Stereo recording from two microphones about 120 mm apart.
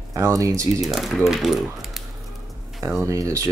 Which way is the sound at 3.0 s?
25° right (ahead or behind).